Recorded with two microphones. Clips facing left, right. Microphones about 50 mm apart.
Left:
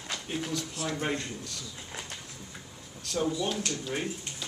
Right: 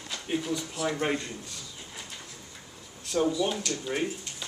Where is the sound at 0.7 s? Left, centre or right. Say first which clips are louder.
Right 5 dB; right.